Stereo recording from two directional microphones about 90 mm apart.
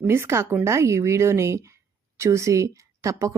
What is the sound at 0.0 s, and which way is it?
A woman's voice, 25° right (ahead or behind).